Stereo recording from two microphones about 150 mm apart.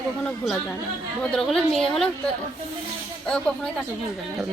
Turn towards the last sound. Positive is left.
turn(degrees=5)  # may be behind; listen again after turning